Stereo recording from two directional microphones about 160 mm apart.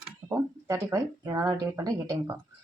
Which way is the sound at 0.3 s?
20° right (ahead or behind).